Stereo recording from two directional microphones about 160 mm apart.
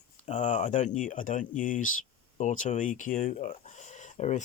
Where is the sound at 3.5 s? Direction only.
45° left (ahead or behind).